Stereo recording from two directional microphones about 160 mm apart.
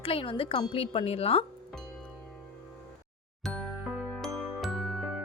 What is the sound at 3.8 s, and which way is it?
Music, 10° right (ahead or behind).